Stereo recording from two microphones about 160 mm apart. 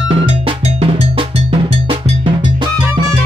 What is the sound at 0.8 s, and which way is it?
Cowbell, 35° right (ahead or behind).